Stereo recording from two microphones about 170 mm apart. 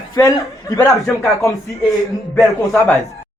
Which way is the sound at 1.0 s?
Centre (ahead or behind).